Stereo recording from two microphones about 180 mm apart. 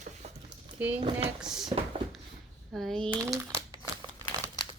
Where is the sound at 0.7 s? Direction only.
10° right (ahead or behind).